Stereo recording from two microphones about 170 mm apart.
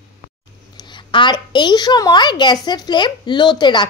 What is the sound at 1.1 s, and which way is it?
A woman's voice, 25° left (ahead or behind).